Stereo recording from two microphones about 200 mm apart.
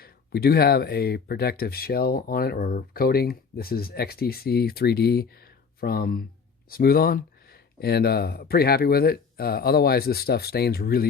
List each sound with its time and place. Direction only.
0.0 s speech: 50° left (ahead or behind)